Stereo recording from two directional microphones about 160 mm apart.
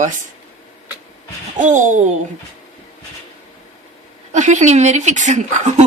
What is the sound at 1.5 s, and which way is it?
Speech, 50° right (ahead or behind).